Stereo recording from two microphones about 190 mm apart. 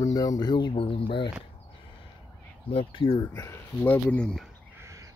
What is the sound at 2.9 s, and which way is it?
Speech, 25° left (ahead or behind).